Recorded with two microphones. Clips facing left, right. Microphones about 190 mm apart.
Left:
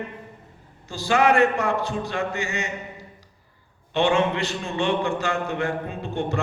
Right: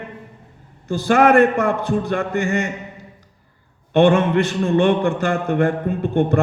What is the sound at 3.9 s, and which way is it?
A man's voice, 55° right (ahead or behind).